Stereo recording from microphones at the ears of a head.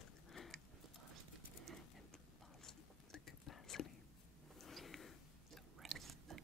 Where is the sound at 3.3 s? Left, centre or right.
Left.